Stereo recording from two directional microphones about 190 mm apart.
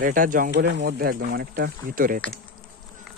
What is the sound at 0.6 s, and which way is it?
Speech, 60° right (ahead or behind).